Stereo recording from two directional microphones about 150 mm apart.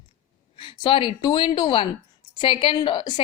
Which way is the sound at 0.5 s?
35° left (ahead or behind).